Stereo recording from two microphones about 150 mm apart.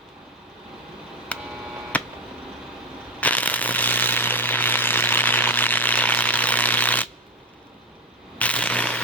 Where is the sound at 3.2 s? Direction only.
10° left (ahead or behind).